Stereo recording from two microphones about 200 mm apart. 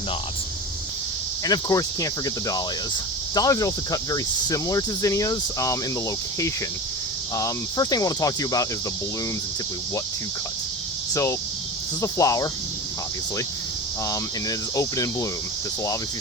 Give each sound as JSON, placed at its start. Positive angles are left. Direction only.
{"t": 1.5, "sound": "cricket", "side_deg": 20}
{"t": 7.3, "sound": "cricket", "side_deg": 15}
{"t": 11.1, "sound": "speech", "side_deg": 15}
{"t": 12.0, "sound": "cricket", "side_deg": 15}
{"t": 14.8, "sound": "cricket", "side_deg": 15}